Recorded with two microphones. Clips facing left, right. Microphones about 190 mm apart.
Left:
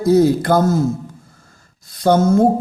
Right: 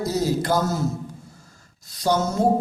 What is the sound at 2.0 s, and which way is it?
Speech, 55° left (ahead or behind).